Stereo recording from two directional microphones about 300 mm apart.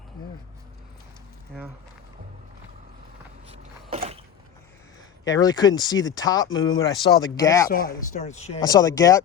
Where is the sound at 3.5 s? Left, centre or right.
Centre.